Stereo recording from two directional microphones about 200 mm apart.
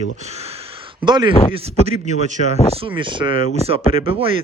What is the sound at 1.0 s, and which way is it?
Speech, 20° right (ahead or behind).